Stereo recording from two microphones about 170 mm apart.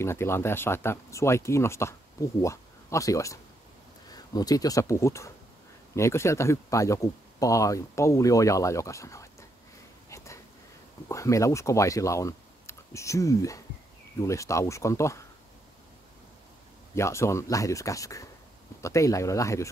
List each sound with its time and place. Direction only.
0.0 s speech: 15° left (ahead or behind)
10.0 s a sound: 15° left (ahead or behind)
11.1 s speech: 20° left (ahead or behind)
16.9 s speech: 15° left (ahead or behind)